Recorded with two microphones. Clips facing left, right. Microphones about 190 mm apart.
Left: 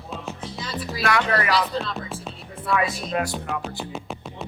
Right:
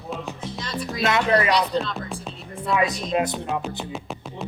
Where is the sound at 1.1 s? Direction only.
20° right (ahead or behind).